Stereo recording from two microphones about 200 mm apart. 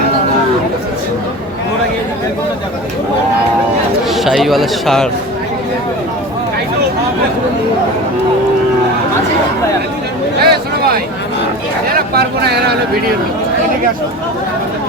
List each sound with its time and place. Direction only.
4.1 s a man's voice: centre (ahead or behind)
10.4 s a sound: 50° right (ahead or behind)
11.9 s speech: 55° right (ahead or behind)